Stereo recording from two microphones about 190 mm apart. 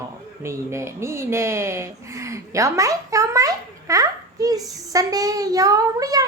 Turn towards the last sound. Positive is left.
turn(degrees=-20)  # may be behind; listen again after turning